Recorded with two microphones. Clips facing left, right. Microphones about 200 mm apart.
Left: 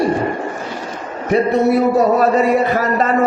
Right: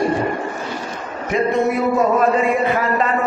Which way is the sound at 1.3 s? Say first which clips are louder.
Left 4 dB; 35° left (ahead or behind).